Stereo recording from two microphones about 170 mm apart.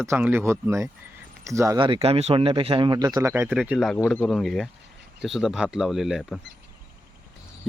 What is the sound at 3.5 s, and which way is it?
Speech, 5° right (ahead or behind).